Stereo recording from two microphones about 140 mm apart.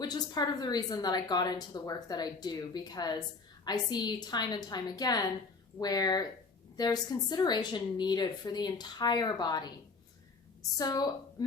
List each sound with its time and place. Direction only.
0.0 s a woman's voice: 30° left (ahead or behind)
10.8 s a woman's voice: 25° left (ahead or behind)